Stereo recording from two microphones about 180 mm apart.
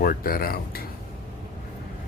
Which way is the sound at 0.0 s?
50° left (ahead or behind).